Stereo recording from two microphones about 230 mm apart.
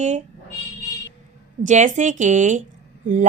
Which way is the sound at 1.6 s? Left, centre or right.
Right.